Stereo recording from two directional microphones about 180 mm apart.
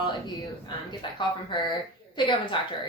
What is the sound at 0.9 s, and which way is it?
A woman's voice, 25° left (ahead or behind).